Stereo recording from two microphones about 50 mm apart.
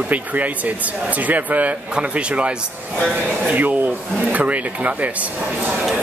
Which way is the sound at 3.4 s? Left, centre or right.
Right.